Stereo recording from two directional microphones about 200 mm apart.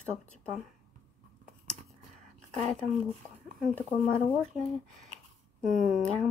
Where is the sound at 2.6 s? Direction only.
5° left (ahead or behind).